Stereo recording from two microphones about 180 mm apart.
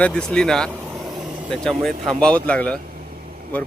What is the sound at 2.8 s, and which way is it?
Vehicle, 55° right (ahead or behind).